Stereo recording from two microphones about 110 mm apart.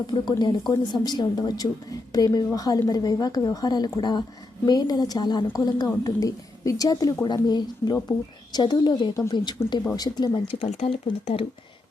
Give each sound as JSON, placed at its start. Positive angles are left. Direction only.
{"t": 0.1, "sound": "a woman's voice", "side_deg": 45}
{"t": 10.4, "sound": "speech", "side_deg": 55}